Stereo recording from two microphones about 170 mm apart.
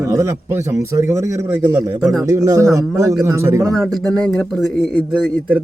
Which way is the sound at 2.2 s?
20° right (ahead or behind).